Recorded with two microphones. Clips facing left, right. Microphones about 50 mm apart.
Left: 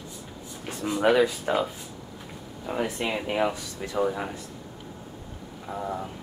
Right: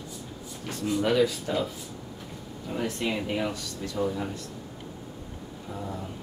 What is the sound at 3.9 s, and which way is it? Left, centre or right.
Speech, left.